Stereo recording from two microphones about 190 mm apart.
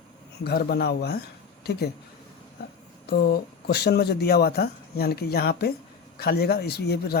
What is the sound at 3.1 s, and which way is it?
Speech, 55° left (ahead or behind).